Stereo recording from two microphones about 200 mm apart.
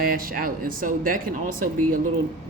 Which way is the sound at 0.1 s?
45° right (ahead or behind).